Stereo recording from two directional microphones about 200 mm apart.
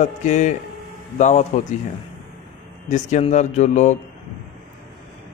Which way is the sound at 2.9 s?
35° left (ahead or behind).